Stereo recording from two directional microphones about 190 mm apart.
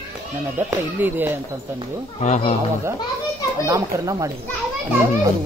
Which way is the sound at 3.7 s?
15° right (ahead or behind).